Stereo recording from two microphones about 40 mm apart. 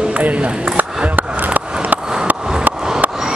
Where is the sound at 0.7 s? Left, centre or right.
Right.